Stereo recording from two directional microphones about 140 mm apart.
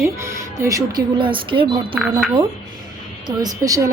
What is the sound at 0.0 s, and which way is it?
Speech, 20° right (ahead or behind).